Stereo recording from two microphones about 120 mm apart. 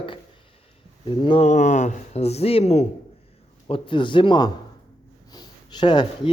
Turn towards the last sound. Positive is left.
turn(degrees=40)  # may be behind; listen again after turning